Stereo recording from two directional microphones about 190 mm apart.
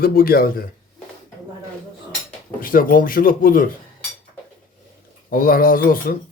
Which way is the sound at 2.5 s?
50° left (ahead or behind).